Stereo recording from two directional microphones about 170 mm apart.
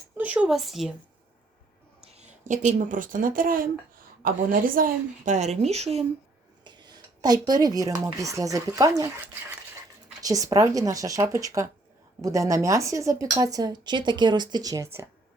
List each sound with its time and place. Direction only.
0.2 s speech: 5° right (ahead or behind)
2.0 s a woman's voice: 40° right (ahead or behind)
6.7 s speech: 25° right (ahead or behind)